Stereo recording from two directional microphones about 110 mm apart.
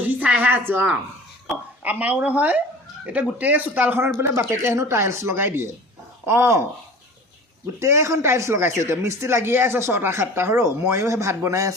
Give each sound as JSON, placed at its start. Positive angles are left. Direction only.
{"t": 0.1, "sound": "a sound", "side_deg": -15}
{"t": 1.8, "sound": "a man's voice", "side_deg": -15}
{"t": 7.8, "sound": "a man's voice", "side_deg": -25}